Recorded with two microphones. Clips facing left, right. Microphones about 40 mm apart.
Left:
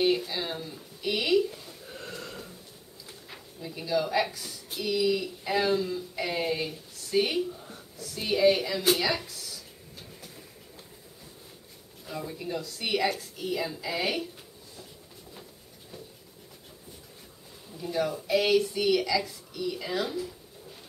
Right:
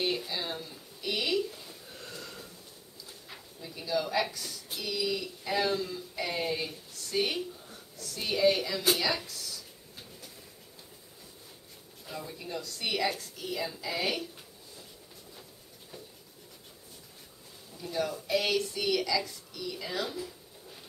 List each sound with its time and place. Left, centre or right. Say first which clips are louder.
0.0 s a woman's voice: left 6 dB; centre
2.2 s a sound: left 4 dB; centre
3.3 s a woman's voice: left 5 dB; centre
7.6 s a sound: left 3 dB; centre
12.1 s a woman's voice: left 5 dB; centre
17.7 s a woman's voice: left 4 dB; centre